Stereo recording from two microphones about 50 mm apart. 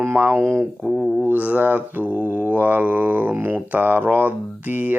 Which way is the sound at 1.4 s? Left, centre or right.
Right.